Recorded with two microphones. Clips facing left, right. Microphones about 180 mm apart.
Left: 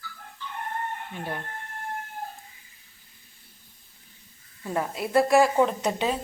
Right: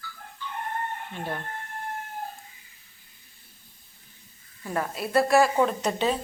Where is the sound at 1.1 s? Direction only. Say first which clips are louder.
Right 2 dB; 10° left (ahead or behind).